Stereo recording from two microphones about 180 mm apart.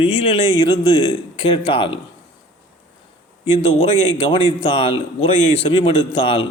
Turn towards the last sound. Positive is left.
turn(degrees=30)  # may be behind; listen again after turning